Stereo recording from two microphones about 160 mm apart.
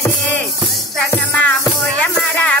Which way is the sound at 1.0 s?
15° left (ahead or behind).